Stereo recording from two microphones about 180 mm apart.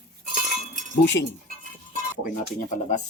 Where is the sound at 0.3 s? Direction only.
45° right (ahead or behind).